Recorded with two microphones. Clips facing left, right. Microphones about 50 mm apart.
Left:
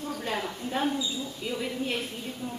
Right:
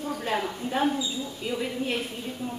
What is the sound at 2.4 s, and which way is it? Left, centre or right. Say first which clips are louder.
Speech: right 2 dB; centre.